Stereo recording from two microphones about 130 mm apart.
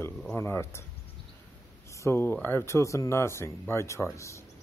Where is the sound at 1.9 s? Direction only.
20° left (ahead or behind).